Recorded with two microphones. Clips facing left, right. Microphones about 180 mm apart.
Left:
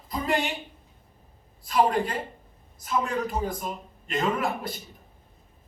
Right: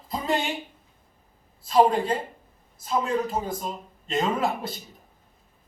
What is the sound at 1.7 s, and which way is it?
A man's voice, 25° right (ahead or behind).